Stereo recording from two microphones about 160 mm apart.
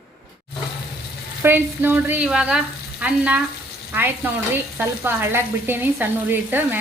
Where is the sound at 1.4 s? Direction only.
15° right (ahead or behind).